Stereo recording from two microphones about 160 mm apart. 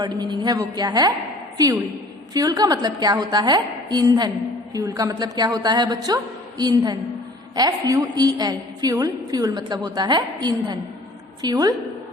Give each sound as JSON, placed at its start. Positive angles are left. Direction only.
{"t": 0.0, "sound": "a woman's voice", "side_deg": -25}
{"t": 2.3, "sound": "a woman's voice", "side_deg": -25}